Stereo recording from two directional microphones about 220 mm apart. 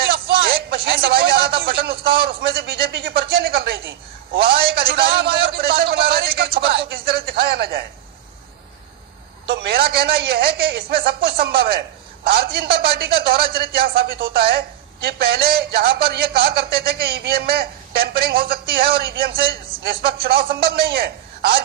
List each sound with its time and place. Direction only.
0.4 s a man's voice: 45° right (ahead or behind)
5.6 s a sound: 45° right (ahead or behind)
9.5 s a man's voice: 50° right (ahead or behind)